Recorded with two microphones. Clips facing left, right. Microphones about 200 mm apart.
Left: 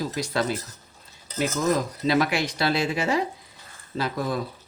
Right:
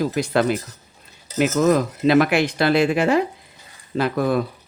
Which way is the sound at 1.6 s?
60° right (ahead or behind).